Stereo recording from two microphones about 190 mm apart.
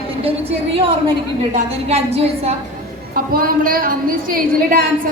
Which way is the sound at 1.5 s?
35° right (ahead or behind).